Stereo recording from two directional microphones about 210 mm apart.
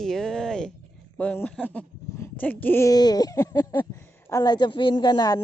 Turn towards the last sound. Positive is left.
turn(degrees=20)  # may be behind; listen again after turning